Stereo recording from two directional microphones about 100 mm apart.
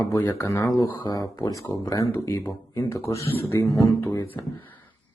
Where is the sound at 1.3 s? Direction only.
30° left (ahead or behind).